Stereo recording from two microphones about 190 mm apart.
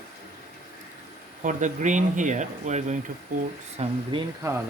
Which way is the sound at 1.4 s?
40° right (ahead or behind).